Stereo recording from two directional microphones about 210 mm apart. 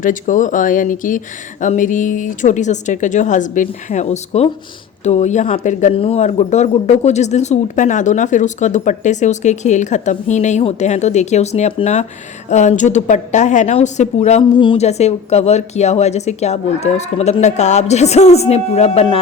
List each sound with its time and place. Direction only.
0.0 s speech: 40° left (ahead or behind)